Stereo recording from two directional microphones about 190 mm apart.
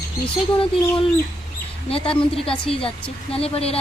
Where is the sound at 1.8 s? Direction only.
30° left (ahead or behind).